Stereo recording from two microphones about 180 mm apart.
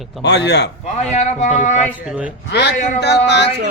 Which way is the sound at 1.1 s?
40° left (ahead or behind).